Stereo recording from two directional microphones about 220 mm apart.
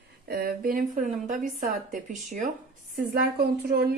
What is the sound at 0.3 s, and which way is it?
Speech, 45° right (ahead or behind).